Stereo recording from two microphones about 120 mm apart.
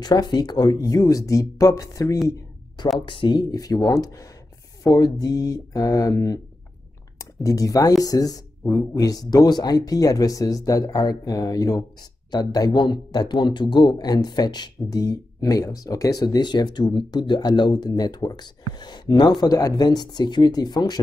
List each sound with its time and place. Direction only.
0.0 s speech: 35° left (ahead or behind)
3.1 s speech: 40° left (ahead or behind)